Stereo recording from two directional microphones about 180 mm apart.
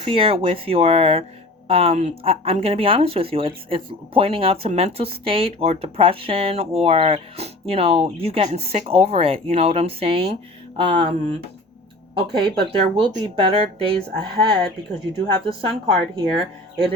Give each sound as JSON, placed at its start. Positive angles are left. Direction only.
{"t": 0.0, "sound": "speech", "side_deg": -30}
{"t": 13.0, "sound": "speech", "side_deg": -25}